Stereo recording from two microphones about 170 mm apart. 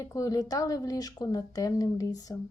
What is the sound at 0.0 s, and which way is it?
A woman's voice, 20° left (ahead or behind).